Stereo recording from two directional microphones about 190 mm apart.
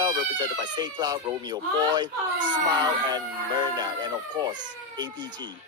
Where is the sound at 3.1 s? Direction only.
20° right (ahead or behind).